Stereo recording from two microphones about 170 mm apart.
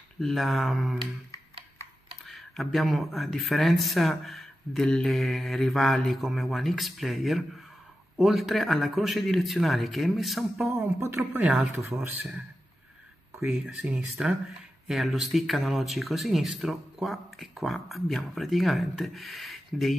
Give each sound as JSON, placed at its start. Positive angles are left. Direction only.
{"t": 0.2, "sound": "speech", "side_deg": 0}
{"t": 2.2, "sound": "speech", "side_deg": 0}
{"t": 10.7, "sound": "speech", "side_deg": -15}
{"t": 11.1, "sound": "speech", "side_deg": -5}
{"t": 13.5, "sound": "speech", "side_deg": -5}